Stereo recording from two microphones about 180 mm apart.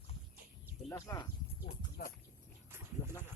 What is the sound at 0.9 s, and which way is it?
Speech, 15° left (ahead or behind).